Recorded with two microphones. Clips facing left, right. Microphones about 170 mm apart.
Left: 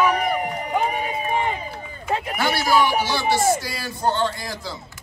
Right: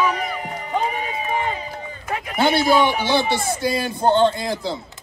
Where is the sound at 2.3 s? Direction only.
25° right (ahead or behind).